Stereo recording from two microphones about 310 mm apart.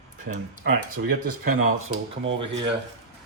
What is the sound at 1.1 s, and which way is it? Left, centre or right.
Cutlery, right.